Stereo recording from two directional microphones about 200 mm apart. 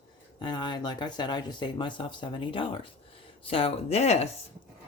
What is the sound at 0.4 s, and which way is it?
Speech, 20° left (ahead or behind).